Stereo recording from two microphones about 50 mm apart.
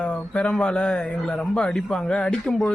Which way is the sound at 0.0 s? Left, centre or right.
Left.